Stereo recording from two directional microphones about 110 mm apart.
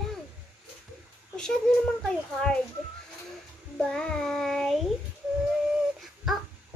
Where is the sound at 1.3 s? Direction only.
5° left (ahead or behind).